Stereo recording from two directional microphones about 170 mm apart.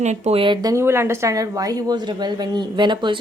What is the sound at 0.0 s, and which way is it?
Speech, 40° right (ahead or behind).